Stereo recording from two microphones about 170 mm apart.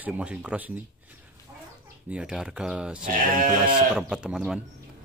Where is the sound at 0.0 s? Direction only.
5° right (ahead or behind).